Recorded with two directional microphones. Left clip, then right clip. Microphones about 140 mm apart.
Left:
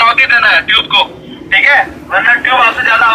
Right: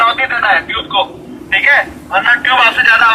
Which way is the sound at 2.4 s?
10° left (ahead or behind).